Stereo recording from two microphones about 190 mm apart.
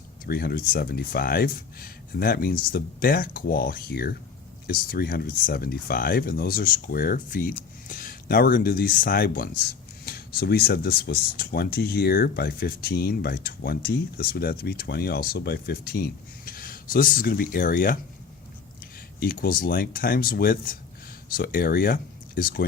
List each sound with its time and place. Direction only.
0.3 s speech: 50° left (ahead or behind)
19.2 s speech: 50° left (ahead or behind)